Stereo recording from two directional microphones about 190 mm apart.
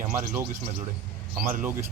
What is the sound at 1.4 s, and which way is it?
Speech, 45° right (ahead or behind).